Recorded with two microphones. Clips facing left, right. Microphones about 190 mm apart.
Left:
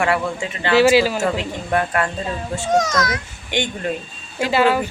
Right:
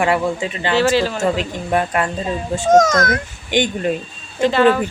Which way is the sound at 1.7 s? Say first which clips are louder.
Right 2 dB; 20° right (ahead or behind).